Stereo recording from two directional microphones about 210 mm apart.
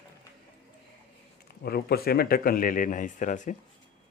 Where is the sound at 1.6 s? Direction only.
50° left (ahead or behind).